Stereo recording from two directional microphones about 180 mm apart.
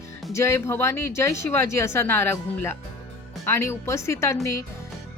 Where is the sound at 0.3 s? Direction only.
15° left (ahead or behind).